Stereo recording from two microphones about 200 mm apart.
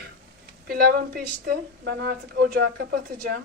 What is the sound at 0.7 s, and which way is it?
A woman's voice, 50° right (ahead or behind).